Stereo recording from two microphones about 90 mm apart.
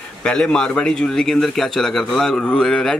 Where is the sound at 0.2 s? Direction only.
10° left (ahead or behind).